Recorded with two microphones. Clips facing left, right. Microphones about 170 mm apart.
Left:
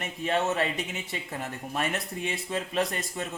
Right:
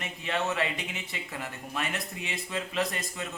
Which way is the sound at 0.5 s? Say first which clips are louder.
Left 3 dB; 40° left (ahead or behind).